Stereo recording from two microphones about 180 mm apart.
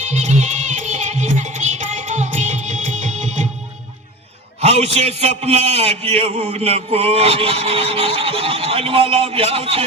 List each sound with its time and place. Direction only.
0.1 s music: 40° right (ahead or behind)
4.6 s a man's voice: 35° right (ahead or behind)